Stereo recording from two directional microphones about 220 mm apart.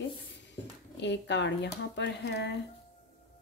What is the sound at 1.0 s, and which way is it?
Speech, 55° left (ahead or behind).